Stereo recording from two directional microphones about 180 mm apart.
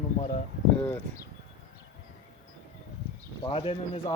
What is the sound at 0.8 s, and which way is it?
Speech, 10° left (ahead or behind).